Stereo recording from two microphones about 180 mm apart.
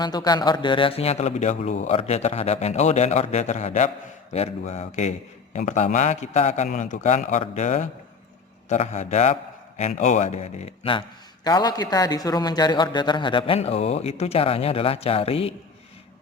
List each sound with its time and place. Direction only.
0.0 s a man's voice: 20° left (ahead or behind)
11.4 s a man's voice: 20° left (ahead or behind)